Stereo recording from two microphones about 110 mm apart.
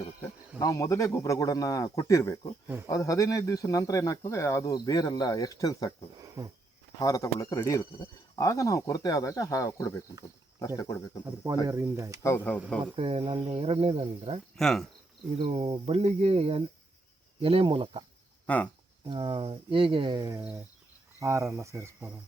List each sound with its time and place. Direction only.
0.6 s speech: 30° left (ahead or behind)
4.7 s speech: 35° left (ahead or behind)
6.4 s speech: 25° right (ahead or behind)
7.0 s speech: 35° left (ahead or behind)
11.4 s speech: 30° right (ahead or behind)
12.8 s speech: 60° right (ahead or behind)
14.5 s speech: 5° left (ahead or behind)
15.4 s speech: 70° right (ahead or behind); by 18.0 s 50° right (ahead or behind)
18.4 s speech: 15° left (ahead or behind)
19.0 s speech: 45° right (ahead or behind); by 22.1 s 25° right (ahead or behind)